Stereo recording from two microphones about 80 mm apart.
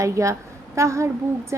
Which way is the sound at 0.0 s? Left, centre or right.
Right.